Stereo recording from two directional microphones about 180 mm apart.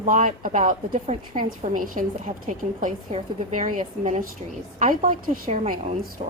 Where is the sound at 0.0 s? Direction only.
45° right (ahead or behind).